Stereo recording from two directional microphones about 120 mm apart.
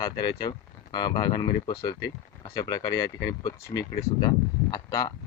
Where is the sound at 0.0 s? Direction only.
35° left (ahead or behind).